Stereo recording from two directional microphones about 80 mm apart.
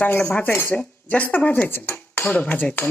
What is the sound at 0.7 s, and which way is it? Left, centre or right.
Speech, centre.